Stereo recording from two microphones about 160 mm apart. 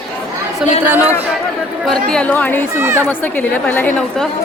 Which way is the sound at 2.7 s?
15° right (ahead or behind).